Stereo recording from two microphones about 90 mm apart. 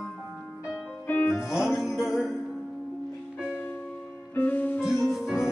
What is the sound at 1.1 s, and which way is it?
Music, 25° left (ahead or behind).